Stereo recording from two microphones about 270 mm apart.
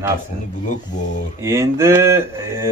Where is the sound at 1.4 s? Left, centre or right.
Centre.